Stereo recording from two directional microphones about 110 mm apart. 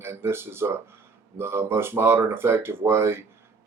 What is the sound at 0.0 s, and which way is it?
Speech, 20° right (ahead or behind).